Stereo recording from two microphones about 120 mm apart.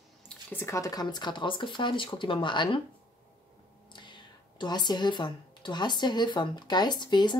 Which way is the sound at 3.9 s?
40° left (ahead or behind).